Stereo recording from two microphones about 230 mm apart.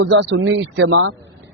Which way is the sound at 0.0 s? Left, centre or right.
Right.